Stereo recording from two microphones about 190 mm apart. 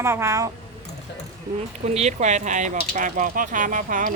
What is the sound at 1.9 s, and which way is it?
Speech, 35° right (ahead or behind).